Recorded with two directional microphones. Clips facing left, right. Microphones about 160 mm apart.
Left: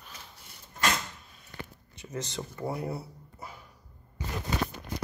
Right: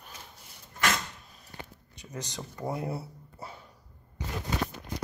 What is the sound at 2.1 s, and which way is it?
Speech, 15° right (ahead or behind).